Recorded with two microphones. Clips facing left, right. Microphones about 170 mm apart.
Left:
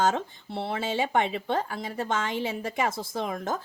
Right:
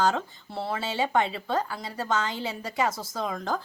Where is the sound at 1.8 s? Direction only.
25° left (ahead or behind).